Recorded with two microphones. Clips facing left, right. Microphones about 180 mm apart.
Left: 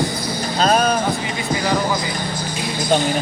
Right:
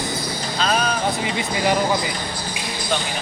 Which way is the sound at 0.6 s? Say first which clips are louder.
Left 5 dB; 40° left (ahead or behind).